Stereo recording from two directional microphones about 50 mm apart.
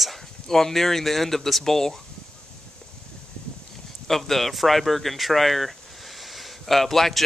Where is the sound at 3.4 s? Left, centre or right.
Centre.